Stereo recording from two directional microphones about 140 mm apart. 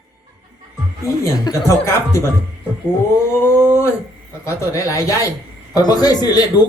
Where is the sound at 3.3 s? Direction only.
20° left (ahead or behind).